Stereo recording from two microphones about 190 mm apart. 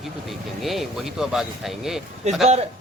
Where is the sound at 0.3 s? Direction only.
Centre (ahead or behind).